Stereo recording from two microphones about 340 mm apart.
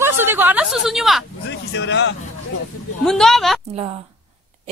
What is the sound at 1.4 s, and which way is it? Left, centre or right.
Speech, left.